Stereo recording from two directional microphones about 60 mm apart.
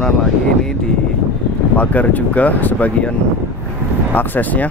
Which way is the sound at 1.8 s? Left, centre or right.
Left.